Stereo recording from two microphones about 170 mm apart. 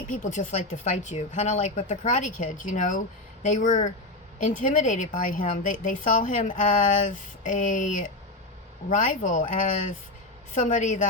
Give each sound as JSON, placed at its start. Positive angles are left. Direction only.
{"t": 0.1, "sound": "speech", "side_deg": 50}